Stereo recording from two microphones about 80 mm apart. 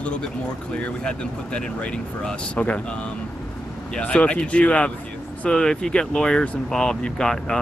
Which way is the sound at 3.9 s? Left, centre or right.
Centre.